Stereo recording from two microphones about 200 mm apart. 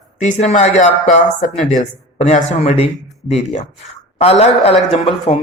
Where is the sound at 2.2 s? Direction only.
35° left (ahead or behind).